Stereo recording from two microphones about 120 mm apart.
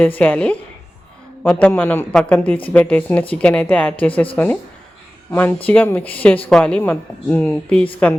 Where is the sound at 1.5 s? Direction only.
15° left (ahead or behind).